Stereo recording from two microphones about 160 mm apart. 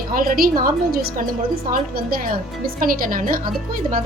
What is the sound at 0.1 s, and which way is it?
A woman's voice, 65° right (ahead or behind).